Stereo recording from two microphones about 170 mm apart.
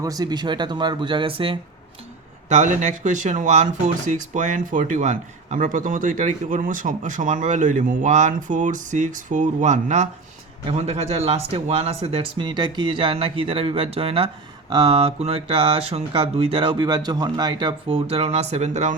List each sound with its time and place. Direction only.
0.0 s speech: 20° right (ahead or behind)
2.5 s speech: 45° right (ahead or behind)